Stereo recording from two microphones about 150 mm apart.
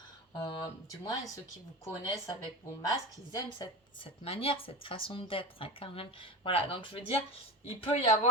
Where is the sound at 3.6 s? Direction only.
35° left (ahead or behind).